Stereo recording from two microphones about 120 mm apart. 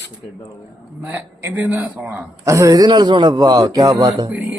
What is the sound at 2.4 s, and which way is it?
A man's voice, 25° right (ahead or behind).